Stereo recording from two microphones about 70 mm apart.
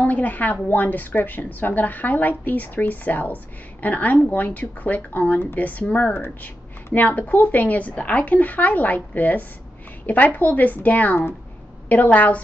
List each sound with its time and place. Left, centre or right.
0.0 s a woman's voice: left
6.1 s a woman's voice: left